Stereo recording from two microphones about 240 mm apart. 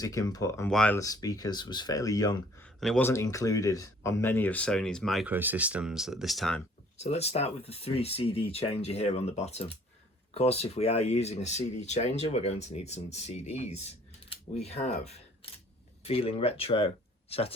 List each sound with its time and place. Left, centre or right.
0.0 s speech: centre
6.9 s speech: left